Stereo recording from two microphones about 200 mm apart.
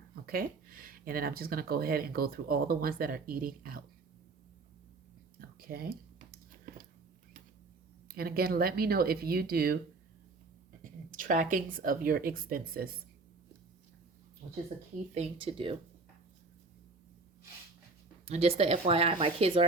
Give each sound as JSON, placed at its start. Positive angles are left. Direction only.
{"t": 0.3, "sound": "speech", "side_deg": -45}
{"t": 5.4, "sound": "a sound", "side_deg": -45}
{"t": 8.0, "sound": "speech", "side_deg": -50}
{"t": 11.1, "sound": "speech", "side_deg": -40}
{"t": 14.7, "sound": "speech", "side_deg": -35}
{"t": 18.3, "sound": "speech", "side_deg": -30}